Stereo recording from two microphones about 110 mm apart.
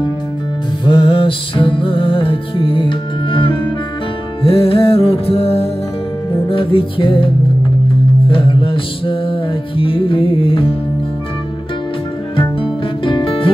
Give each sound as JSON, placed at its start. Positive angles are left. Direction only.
{"t": 0.8, "sound": "music", "side_deg": 50}
{"t": 8.3, "sound": "music", "side_deg": 50}
{"t": 13.0, "sound": "music", "side_deg": 55}